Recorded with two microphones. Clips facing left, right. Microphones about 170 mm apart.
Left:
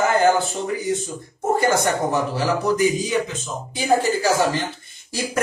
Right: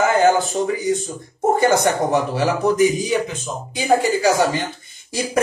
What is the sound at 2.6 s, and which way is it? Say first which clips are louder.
Speech: right 4 dB; 20° right (ahead or behind).